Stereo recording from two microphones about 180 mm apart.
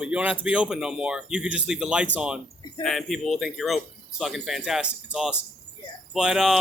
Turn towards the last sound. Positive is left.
turn(degrees=-5)  # may be behind; listen again after turning